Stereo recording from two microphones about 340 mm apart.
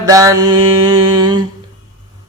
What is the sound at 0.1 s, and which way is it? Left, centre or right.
Music, centre.